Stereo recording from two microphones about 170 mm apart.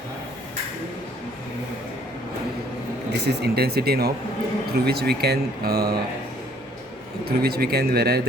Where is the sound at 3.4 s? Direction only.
70° right (ahead or behind).